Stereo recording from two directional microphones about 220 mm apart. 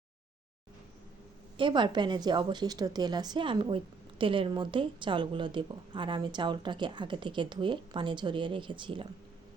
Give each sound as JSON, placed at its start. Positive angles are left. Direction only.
{"t": 1.5, "sound": "a woman's voice", "side_deg": -20}